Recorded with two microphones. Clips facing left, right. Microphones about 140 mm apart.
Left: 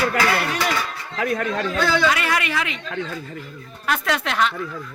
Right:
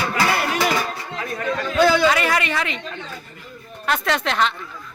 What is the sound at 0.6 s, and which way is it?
Speech, 30° right (ahead or behind).